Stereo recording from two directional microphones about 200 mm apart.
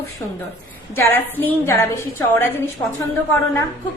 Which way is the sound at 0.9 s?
10° left (ahead or behind).